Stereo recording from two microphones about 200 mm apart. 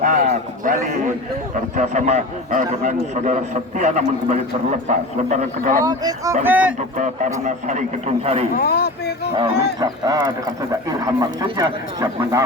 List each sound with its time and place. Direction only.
0.0 s a sound: 40° right (ahead or behind)
1.7 s a man's voice: 35° right (ahead or behind)
5.8 s speech: 20° right (ahead or behind)
6.4 s speech: 10° right (ahead or behind)
7.4 s a man's voice: 35° right (ahead or behind)
8.5 s speech: 50° left (ahead or behind)
9.8 s speech: 20° right (ahead or behind)